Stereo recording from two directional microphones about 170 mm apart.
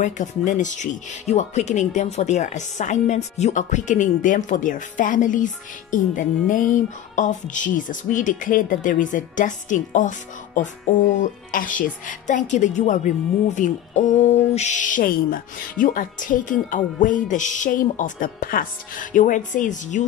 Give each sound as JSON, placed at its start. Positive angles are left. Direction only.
{"t": 0.0, "sound": "speech", "side_deg": 45}